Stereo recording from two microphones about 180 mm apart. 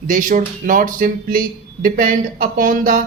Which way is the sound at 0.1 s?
45° right (ahead or behind).